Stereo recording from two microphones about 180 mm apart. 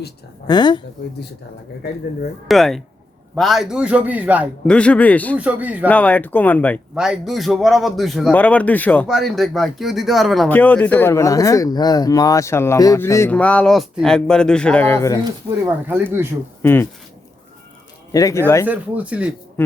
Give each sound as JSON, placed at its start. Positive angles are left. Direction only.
{"t": 0.4, "sound": "a woman's voice", "side_deg": 25}
{"t": 2.5, "sound": "a man's voice", "side_deg": 0}
{"t": 4.6, "sound": "speech", "side_deg": 5}
{"t": 5.4, "sound": "speech", "side_deg": -10}
{"t": 5.9, "sound": "speech", "side_deg": 10}
{"t": 6.9, "sound": "a man's voice", "side_deg": -5}
{"t": 15.2, "sound": "speech", "side_deg": -15}
{"t": 16.6, "sound": "speech", "side_deg": 10}
{"t": 18.1, "sound": "speech", "side_deg": 20}
{"t": 18.6, "sound": "speech", "side_deg": -10}
{"t": 19.6, "sound": "speech", "side_deg": 10}